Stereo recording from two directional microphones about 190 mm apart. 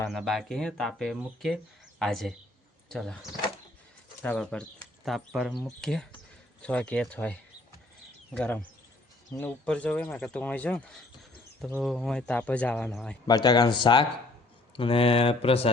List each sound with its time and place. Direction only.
0.1 s speech: centre (ahead or behind)
4.2 s speech: 5° left (ahead or behind)
13.2 s speech: 20° left (ahead or behind)